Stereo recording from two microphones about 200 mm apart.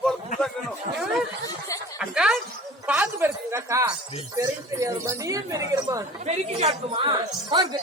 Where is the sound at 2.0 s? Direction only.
Centre (ahead or behind).